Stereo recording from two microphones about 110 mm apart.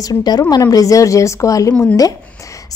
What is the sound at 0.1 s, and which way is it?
A woman's voice, 35° left (ahead or behind).